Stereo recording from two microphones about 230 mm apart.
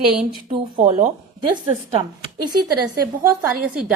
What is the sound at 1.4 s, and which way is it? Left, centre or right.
Speech, right.